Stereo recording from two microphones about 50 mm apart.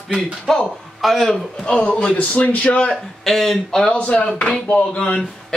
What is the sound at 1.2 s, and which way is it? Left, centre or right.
A man's voice, centre.